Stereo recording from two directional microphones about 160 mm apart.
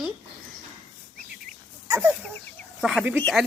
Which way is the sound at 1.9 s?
10° right (ahead or behind).